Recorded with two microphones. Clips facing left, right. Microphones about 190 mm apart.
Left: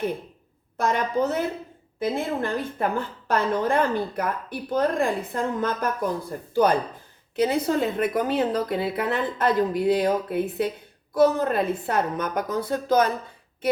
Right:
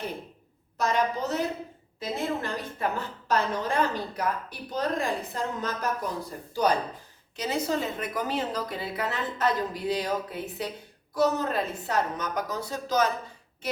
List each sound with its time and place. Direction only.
0.8 s a woman's voice: 55° left (ahead or behind)